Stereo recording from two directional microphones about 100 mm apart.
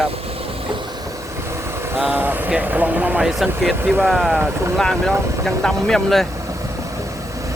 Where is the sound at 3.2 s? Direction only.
Centre (ahead or behind).